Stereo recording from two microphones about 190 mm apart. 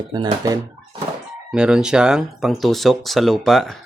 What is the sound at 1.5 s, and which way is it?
Speech, 5° right (ahead or behind).